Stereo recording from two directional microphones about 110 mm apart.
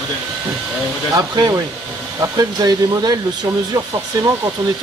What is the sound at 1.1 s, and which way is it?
Speech, 35° right (ahead or behind).